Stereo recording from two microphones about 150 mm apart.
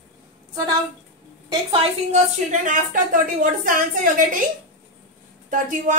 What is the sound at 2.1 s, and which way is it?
A woman's voice, 55° right (ahead or behind).